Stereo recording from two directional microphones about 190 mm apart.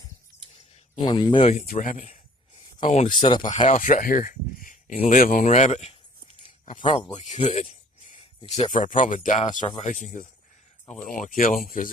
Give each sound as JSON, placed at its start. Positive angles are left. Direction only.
{"t": 0.9, "sound": "speech", "side_deg": 25}
{"t": 1.6, "sound": "speech", "side_deg": 45}
{"t": 3.1, "sound": "speech", "side_deg": 25}
{"t": 3.5, "sound": "speech", "side_deg": 40}